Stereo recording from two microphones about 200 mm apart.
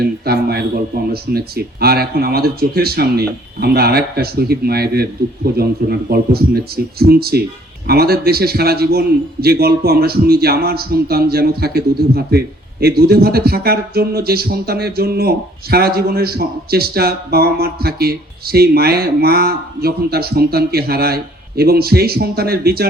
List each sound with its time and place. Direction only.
0.0 s a man's voice: 50° right (ahead or behind)